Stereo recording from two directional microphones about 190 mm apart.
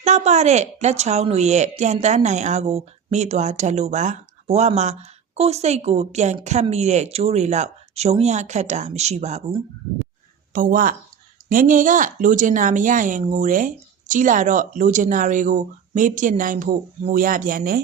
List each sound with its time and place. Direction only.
0.0 s speech: 35° right (ahead or behind)
10.5 s speech: 45° right (ahead or behind)